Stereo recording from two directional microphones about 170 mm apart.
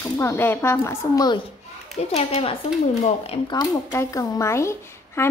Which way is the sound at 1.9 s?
40° left (ahead or behind).